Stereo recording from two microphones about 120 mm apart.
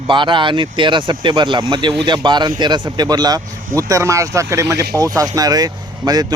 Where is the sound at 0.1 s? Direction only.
40° right (ahead or behind).